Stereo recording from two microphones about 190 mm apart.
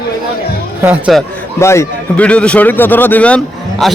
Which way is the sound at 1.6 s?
15° left (ahead or behind).